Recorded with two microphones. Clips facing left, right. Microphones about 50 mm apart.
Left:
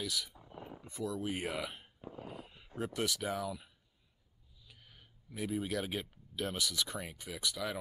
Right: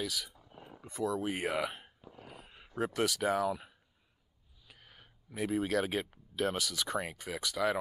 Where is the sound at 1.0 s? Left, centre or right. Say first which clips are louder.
Right 4 dB; right.